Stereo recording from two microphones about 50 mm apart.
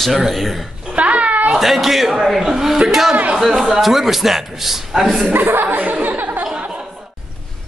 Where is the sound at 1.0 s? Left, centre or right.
Right.